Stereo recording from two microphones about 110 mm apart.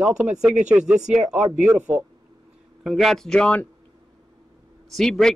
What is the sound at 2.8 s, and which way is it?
Speech, centre (ahead or behind).